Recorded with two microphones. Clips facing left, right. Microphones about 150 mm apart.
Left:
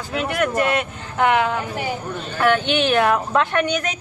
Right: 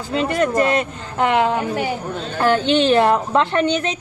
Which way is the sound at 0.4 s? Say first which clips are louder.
Right 2 dB; 35° right (ahead or behind).